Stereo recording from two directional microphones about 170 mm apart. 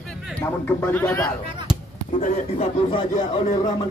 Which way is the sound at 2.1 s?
45° left (ahead or behind).